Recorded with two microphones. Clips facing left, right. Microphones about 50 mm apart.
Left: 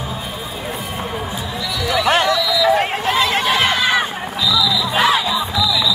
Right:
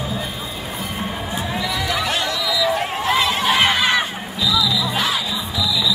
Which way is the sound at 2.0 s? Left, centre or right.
Left.